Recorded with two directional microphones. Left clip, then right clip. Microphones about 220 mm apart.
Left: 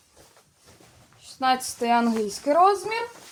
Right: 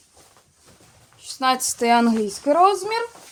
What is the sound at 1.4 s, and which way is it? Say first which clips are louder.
Speech: right 3 dB; 40° right (ahead or behind).